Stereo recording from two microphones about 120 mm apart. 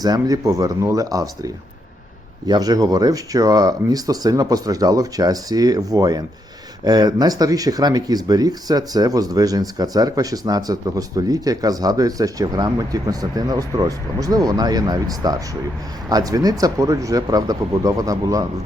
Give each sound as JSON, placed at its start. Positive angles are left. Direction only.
{"t": 0.0, "sound": "speech", "side_deg": -30}
{"t": 2.5, "sound": "speech", "side_deg": -30}